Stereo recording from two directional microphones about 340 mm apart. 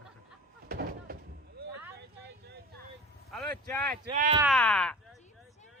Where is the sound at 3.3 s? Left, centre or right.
Centre.